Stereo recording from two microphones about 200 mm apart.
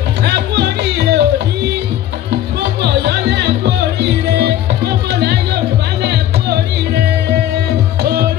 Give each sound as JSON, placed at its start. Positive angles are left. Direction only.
{"t": 0.2, "sound": "music", "side_deg": -55}
{"t": 2.8, "sound": "music", "side_deg": -55}
{"t": 8.0, "sound": "music", "side_deg": -50}